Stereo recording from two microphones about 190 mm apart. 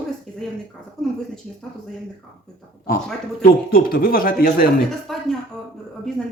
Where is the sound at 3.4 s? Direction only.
50° left (ahead or behind).